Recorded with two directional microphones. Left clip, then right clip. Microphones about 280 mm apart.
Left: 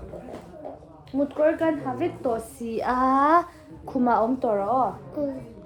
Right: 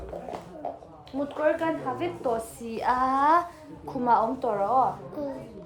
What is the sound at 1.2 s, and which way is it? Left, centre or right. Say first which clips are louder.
A woman's voice: left 3 dB; centre.